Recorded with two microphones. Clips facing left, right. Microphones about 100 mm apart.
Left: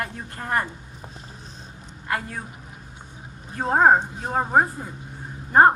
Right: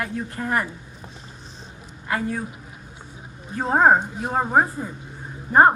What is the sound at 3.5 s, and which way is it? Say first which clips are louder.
Speech: even; 45° left (ahead or behind).